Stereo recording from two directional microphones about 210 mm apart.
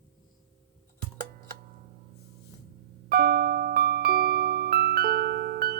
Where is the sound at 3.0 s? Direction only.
45° right (ahead or behind).